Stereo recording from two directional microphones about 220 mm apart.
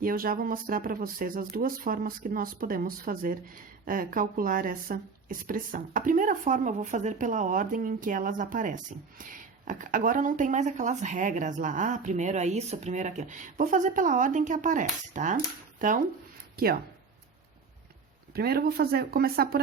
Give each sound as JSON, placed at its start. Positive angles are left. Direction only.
{"t": 0.0, "sound": "speech", "side_deg": -40}
{"t": 18.3, "sound": "speech", "side_deg": -45}